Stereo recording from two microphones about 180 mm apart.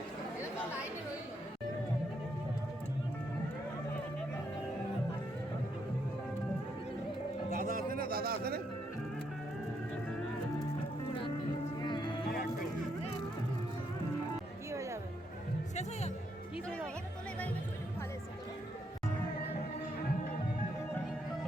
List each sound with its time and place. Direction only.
7.5 s speech: 50° right (ahead or behind)
11.8 s music: 25° left (ahead or behind)
12.3 s music: 55° left (ahead or behind)
14.7 s music: 15° right (ahead or behind)
15.7 s music: 40° left (ahead or behind)
16.6 s music: 5° left (ahead or behind)